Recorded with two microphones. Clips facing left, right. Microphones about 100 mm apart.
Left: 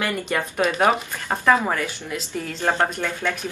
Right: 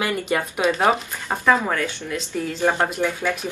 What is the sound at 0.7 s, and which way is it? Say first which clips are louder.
Speech: right 2 dB; centre (ahead or behind).